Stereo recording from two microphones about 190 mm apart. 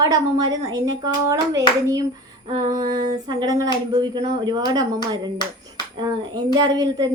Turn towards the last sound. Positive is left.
turn(degrees=-20)  # may be behind; listen again after turning